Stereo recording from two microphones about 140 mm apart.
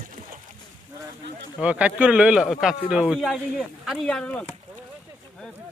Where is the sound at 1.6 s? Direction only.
10° right (ahead or behind).